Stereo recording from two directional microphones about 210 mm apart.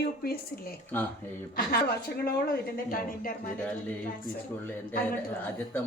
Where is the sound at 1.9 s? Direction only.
50° left (ahead or behind).